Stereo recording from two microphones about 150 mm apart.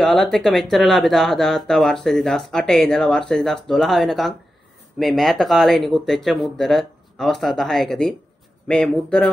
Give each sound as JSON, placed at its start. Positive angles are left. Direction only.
{"t": 0.0, "sound": "speech", "side_deg": 0}